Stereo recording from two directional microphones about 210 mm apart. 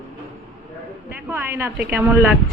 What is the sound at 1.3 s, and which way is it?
Speech, 10° right (ahead or behind).